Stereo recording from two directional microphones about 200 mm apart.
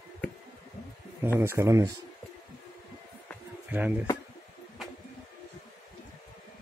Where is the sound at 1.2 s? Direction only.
10° right (ahead or behind).